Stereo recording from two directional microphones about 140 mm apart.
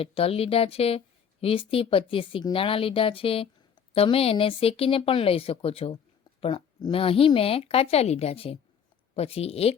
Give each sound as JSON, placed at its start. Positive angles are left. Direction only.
{"t": 0.0, "sound": "speech", "side_deg": 40}